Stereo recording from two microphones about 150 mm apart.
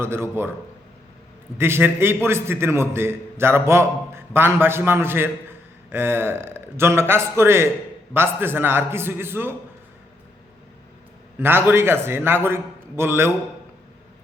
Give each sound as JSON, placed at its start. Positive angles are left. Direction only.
{"t": 0.0, "sound": "a man's voice", "side_deg": -15}
{"t": 1.5, "sound": "a man's voice", "side_deg": -15}
{"t": 11.3, "sound": "a man's voice", "side_deg": -15}